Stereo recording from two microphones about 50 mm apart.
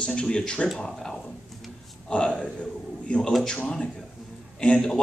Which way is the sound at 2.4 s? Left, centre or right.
Centre.